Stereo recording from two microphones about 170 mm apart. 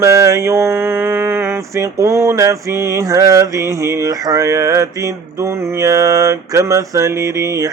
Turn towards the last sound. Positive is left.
turn(degrees=-20)  # may be behind; listen again after turning